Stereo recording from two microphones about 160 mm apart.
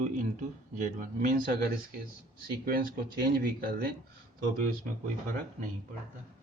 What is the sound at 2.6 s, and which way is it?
Speech, 70° right (ahead or behind).